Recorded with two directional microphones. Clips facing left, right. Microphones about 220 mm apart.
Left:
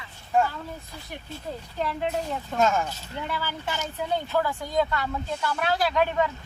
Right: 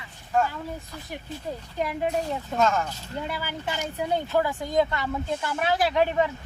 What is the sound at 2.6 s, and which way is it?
Speech, 10° left (ahead or behind).